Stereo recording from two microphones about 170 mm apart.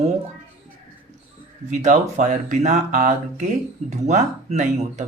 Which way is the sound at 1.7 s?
45° right (ahead or behind).